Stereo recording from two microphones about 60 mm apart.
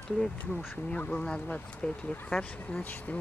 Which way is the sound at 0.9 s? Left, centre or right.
Left.